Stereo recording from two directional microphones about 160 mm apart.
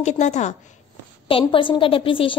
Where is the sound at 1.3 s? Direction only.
35° left (ahead or behind).